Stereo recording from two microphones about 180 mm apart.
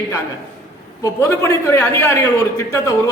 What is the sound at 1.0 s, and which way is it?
A man's voice, 15° left (ahead or behind).